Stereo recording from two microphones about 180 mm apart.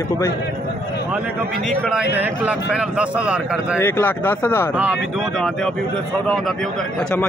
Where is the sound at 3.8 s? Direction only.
10° left (ahead or behind).